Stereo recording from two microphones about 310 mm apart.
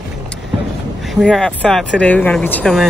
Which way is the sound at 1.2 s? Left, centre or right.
Centre.